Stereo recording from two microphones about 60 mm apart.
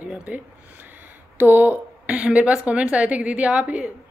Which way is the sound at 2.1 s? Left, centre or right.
Right.